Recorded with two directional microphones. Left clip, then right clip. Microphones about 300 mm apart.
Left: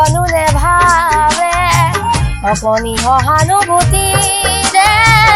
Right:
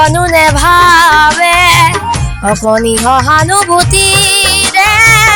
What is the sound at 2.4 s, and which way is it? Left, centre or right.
Speech, right.